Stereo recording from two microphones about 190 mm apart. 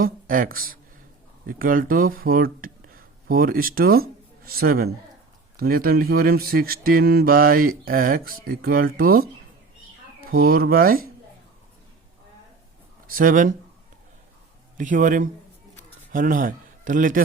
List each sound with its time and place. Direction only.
0.0 s speech: 50° right (ahead or behind)
13.1 s speech: 50° right (ahead or behind)
14.8 s a man's voice: 45° right (ahead or behind)